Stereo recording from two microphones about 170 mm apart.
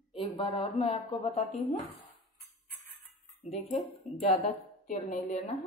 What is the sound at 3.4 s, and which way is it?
A woman's voice, 40° left (ahead or behind).